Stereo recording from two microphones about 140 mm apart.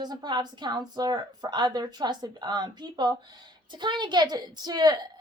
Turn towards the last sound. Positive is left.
turn(degrees=-30)  # may be behind; listen again after turning